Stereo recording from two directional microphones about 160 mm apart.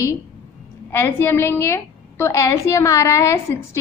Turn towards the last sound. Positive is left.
turn(degrees=15)  # may be behind; listen again after turning